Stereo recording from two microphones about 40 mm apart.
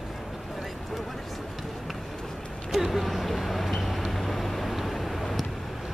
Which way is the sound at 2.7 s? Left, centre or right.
Centre.